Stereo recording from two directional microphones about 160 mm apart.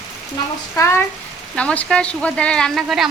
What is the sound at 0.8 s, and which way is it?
A woman's voice, 15° left (ahead or behind).